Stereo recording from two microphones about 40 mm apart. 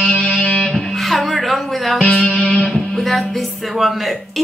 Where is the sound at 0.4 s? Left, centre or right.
Left.